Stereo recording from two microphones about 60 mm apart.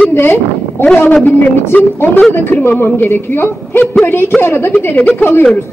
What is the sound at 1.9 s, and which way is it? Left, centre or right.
A woman's voice, left.